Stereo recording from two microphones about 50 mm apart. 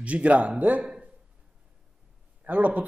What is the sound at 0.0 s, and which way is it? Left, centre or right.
Speech, right.